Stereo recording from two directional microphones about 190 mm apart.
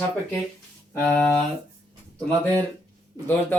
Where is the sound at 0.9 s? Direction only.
5° left (ahead or behind).